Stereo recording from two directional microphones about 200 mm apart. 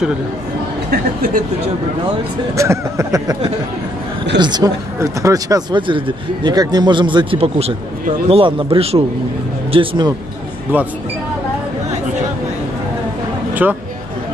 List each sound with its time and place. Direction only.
2.5 s speech: 15° right (ahead or behind)
4.4 s speech: 20° right (ahead or behind)
10.7 s speech: 10° right (ahead or behind)
13.6 s speech: 5° right (ahead or behind)